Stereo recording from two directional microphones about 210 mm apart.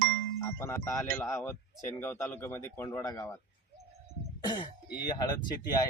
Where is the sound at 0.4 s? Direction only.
15° left (ahead or behind).